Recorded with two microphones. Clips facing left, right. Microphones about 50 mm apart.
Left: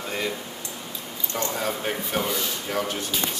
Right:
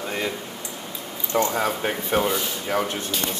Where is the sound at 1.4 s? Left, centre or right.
Centre.